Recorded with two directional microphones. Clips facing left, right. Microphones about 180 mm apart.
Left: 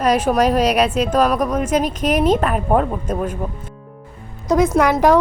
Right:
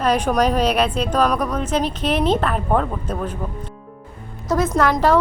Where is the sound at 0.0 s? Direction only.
5° left (ahead or behind).